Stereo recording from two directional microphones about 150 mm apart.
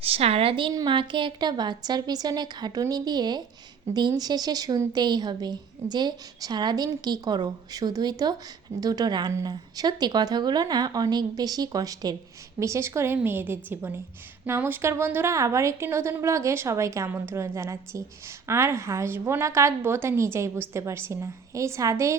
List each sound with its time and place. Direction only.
0.0 s a woman's voice: 40° right (ahead or behind); by 22.1 s 20° right (ahead or behind)